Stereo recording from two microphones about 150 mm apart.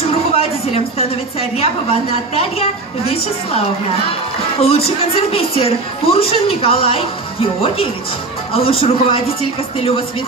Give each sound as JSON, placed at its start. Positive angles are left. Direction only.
{"t": 0.1, "sound": "a woman's voice", "side_deg": 45}